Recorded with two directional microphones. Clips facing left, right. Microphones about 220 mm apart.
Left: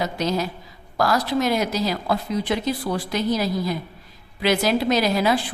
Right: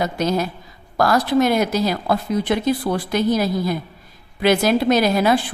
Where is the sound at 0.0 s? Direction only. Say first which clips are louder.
Right 3 dB; 50° right (ahead or behind).